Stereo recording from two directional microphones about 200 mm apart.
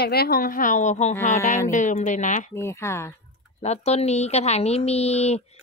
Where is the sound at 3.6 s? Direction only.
30° left (ahead or behind).